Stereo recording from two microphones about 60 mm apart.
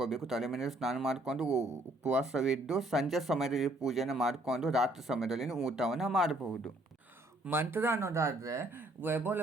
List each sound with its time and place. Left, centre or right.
0.0 s speech: centre
7.5 s speech: right
9.0 s speech: right